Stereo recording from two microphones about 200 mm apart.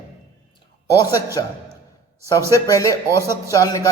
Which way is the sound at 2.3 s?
15° left (ahead or behind).